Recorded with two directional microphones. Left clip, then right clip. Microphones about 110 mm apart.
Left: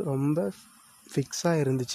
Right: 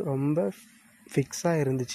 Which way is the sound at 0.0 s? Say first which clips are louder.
Even; 30° left (ahead or behind).